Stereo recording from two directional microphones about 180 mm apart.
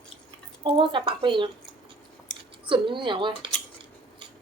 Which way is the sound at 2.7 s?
25° right (ahead or behind).